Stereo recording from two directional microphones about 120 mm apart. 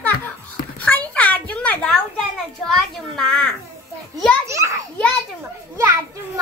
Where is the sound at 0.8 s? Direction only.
15° left (ahead or behind).